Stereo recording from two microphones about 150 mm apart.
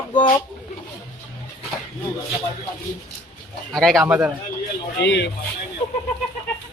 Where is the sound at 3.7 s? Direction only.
Centre (ahead or behind).